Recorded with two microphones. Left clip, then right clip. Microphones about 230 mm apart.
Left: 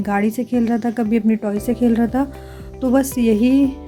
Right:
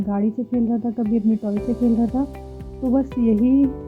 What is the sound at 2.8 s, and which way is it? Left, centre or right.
Speech, left.